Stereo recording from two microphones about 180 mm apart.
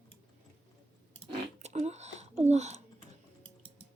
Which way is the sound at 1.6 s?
40° right (ahead or behind).